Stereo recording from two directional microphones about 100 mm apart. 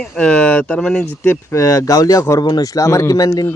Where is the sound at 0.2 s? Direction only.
10° left (ahead or behind).